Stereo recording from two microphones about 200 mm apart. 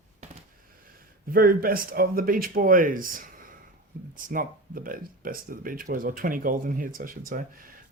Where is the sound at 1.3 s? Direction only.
45° right (ahead or behind).